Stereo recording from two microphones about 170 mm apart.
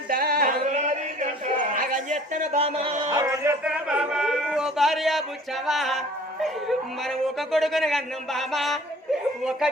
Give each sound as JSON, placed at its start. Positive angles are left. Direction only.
{"t": 0.1, "sound": "a sound", "side_deg": -60}
{"t": 1.7, "sound": "a man's voice", "side_deg": -50}
{"t": 3.6, "sound": "a man's voice", "side_deg": -5}